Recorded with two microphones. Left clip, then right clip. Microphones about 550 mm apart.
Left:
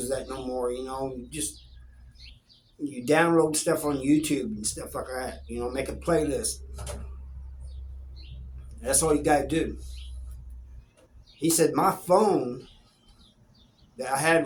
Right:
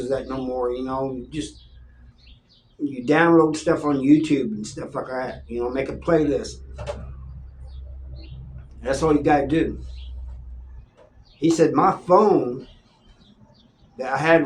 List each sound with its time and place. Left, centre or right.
0.1 s speech: left
3.0 s speech: left
8.8 s speech: left
11.3 s speech: left
13.9 s speech: left